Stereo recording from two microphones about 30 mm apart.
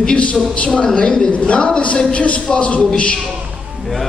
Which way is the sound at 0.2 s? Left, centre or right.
Left.